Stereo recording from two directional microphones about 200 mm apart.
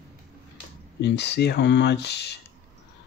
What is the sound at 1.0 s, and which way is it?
Speech, 55° left (ahead or behind).